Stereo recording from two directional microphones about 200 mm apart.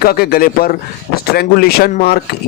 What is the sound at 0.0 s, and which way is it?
Speech, 50° left (ahead or behind).